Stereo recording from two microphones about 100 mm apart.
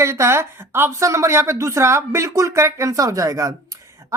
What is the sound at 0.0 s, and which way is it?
A woman's voice, 30° right (ahead or behind).